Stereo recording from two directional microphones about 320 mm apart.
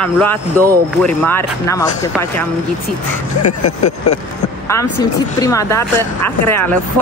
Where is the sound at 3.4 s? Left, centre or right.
Left.